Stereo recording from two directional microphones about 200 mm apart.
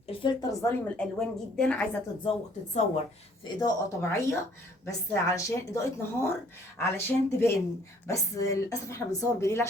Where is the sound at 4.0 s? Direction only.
15° left (ahead or behind).